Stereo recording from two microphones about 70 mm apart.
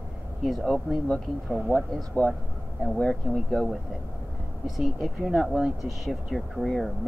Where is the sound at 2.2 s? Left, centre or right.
Centre.